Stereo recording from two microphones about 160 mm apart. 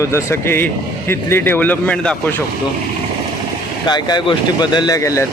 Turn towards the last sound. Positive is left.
turn(degrees=20)  # may be behind; listen again after turning